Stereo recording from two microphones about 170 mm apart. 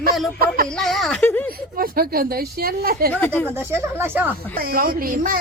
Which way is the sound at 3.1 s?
10° left (ahead or behind).